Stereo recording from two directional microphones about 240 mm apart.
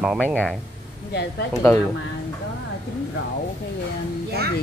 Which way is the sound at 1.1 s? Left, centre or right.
Left.